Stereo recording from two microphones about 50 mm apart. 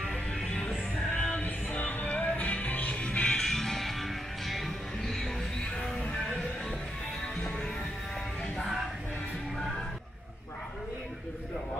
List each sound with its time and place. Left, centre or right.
1.1 s music: centre
1.4 s music: left
3.3 s music: centre